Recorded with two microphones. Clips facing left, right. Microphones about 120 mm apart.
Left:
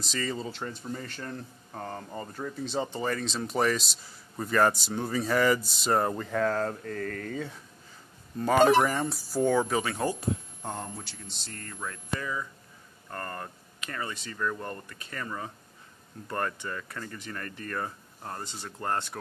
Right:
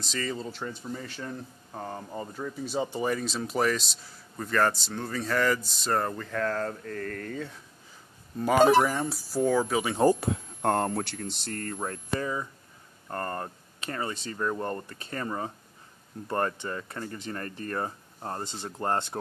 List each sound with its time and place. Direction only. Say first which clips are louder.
0.0 s speech: even; centre (ahead or behind)
10.2 s speech: right 5 dB; 75° right (ahead or behind); by 19.1 s 25° right (ahead or behind)